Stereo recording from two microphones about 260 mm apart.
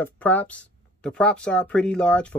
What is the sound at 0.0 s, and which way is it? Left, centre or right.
Speech, centre.